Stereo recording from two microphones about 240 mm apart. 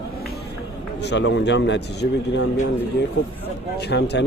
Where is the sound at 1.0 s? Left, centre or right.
Left.